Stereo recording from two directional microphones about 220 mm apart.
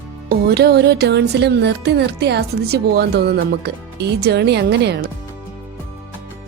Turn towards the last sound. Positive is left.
turn(degrees=-50)  # may be behind; listen again after turning